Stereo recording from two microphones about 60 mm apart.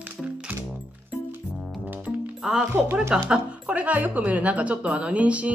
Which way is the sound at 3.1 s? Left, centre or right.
Centre.